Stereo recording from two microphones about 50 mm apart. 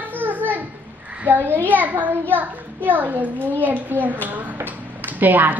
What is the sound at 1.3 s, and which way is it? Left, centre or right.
Speech, right.